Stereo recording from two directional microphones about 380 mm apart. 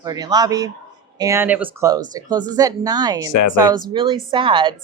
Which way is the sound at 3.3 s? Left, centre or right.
Left.